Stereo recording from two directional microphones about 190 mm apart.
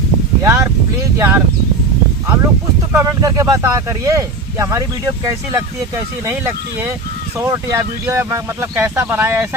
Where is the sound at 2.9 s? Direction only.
15° right (ahead or behind).